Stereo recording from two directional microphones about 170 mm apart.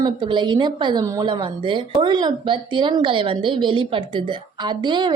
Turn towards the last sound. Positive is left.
turn(degrees=-25)  # may be behind; listen again after turning